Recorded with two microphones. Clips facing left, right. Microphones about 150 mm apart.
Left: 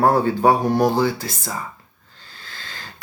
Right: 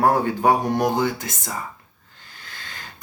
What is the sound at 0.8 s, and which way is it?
Speech, 20° right (ahead or behind).